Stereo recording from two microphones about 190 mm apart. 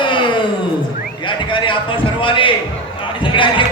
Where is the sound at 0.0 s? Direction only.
25° left (ahead or behind).